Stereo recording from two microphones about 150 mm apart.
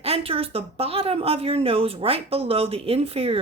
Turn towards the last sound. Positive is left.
turn(degrees=-40)  # may be behind; listen again after turning